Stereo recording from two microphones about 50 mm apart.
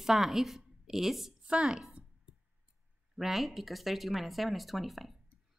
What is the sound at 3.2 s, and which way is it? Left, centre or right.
Speech, centre.